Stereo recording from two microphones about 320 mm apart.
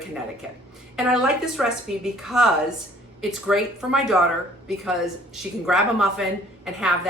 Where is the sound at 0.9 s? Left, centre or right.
Centre.